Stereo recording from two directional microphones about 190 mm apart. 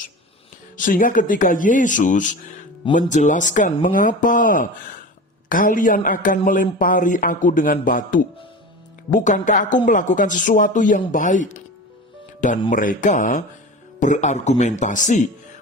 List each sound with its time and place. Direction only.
0.8 s speech: 45° left (ahead or behind)
12.7 s speech: 45° left (ahead or behind)